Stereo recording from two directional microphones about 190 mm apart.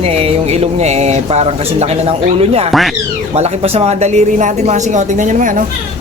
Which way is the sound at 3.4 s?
35° right (ahead or behind).